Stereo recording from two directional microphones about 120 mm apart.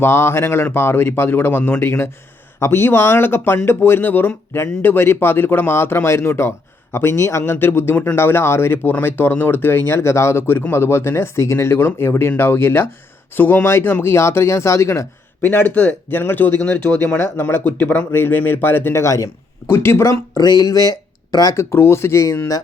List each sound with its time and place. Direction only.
0.0 s speech: 20° left (ahead or behind)